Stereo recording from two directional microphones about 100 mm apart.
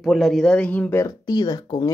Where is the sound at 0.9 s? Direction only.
40° left (ahead or behind).